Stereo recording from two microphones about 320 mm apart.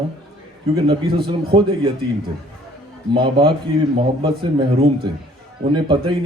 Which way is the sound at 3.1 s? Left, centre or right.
Centre.